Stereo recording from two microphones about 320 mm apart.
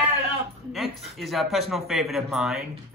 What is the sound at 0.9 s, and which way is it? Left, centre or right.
Speech, centre.